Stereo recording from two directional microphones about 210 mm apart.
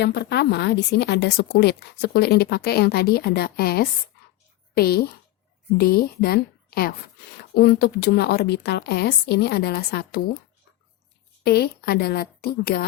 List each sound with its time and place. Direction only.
0.0 s a woman's voice: 55° left (ahead or behind)
11.4 s a woman's voice: 50° left (ahead or behind)